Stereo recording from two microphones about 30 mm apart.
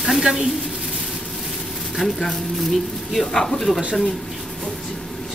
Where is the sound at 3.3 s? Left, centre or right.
Centre.